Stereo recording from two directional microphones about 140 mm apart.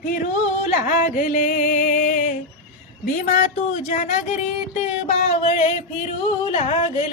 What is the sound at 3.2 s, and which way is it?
Speech, 65° left (ahead or behind).